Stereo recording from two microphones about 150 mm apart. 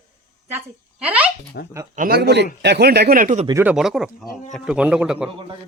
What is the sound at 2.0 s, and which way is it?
Speech, 90° right.